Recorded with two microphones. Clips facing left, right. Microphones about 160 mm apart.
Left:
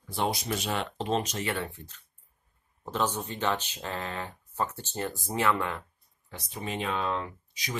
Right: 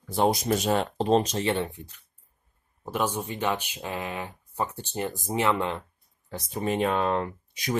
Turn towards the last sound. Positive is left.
turn(degrees=-50)  # may be behind; listen again after turning